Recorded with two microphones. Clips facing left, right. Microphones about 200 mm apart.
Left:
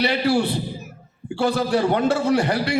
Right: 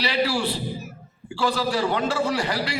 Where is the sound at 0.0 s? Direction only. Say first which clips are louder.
Left 4 dB; 55° left (ahead or behind).